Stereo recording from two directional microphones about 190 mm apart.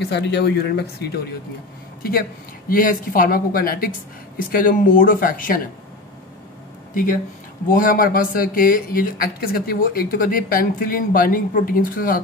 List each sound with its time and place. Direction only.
0.0 s speech: 65° left (ahead or behind)
2.7 s speech: 45° left (ahead or behind)
7.7 s speech: 45° left (ahead or behind)